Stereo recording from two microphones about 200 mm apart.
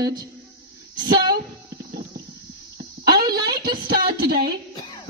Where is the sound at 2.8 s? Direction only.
50° right (ahead or behind).